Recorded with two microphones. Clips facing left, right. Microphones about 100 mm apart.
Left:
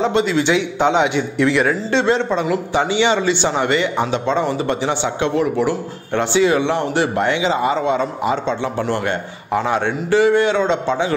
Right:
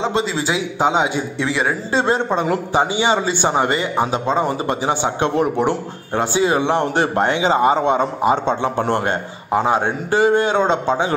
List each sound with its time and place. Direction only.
0.1 s a man's voice: 30° right (ahead or behind)
2.0 s a man's voice: 40° right (ahead or behind)
8.9 s a man's voice: 30° right (ahead or behind)
10.1 s a man's voice: 40° right (ahead or behind)